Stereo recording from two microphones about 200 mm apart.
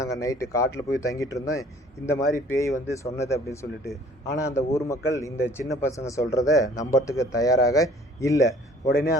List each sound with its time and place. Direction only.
0.0 s a man's voice: 15° left (ahead or behind)